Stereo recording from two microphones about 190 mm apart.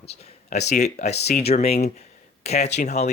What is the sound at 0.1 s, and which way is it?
Speech, 35° left (ahead or behind).